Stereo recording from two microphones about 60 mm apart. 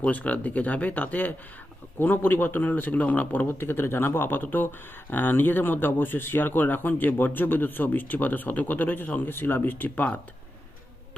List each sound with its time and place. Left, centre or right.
0.0 s speech: left